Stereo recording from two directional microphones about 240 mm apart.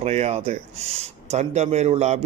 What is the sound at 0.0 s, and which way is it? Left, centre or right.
Speech, right.